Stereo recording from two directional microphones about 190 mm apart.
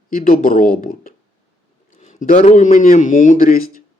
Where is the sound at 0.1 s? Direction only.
45° left (ahead or behind).